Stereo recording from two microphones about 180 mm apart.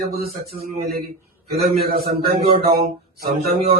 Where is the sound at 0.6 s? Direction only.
55° right (ahead or behind).